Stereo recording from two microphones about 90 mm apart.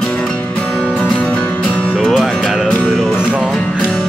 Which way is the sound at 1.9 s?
Centre (ahead or behind).